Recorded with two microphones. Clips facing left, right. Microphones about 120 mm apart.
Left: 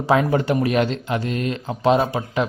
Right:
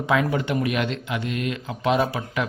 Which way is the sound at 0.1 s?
35° left (ahead or behind).